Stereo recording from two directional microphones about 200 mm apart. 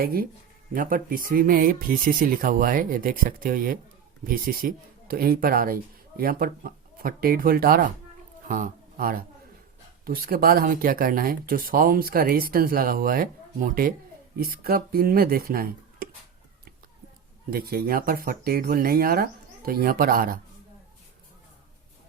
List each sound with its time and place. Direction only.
0.0 s a man's voice: 45° right (ahead or behind)
17.5 s speech: 50° right (ahead or behind)